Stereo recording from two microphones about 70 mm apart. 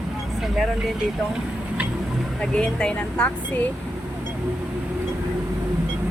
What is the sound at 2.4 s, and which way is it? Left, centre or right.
Speech, centre.